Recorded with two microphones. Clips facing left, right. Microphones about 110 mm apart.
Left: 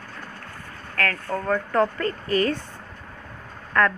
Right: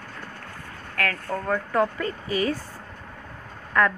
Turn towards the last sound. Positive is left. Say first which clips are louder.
# left 1 dB
turn(degrees=-10)  # may be behind; listen again after turning